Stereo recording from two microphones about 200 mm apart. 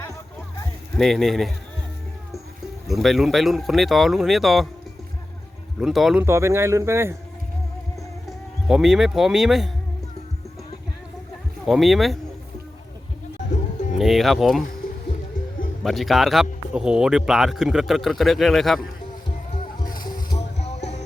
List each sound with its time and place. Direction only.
0.9 s speech: centre (ahead or behind)
2.8 s speech: centre (ahead or behind)
5.8 s speech: centre (ahead or behind)
6.2 s speech: 15° right (ahead or behind)
8.3 s speech: centre (ahead or behind)
11.6 s speech: centre (ahead or behind)
14.0 s speech: centre (ahead or behind)
15.8 s speech: centre (ahead or behind)
19.8 s music: 45° left (ahead or behind)
20.6 s music: 35° left (ahead or behind)